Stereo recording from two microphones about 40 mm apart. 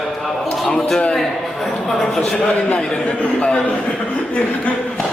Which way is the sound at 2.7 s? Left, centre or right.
Centre.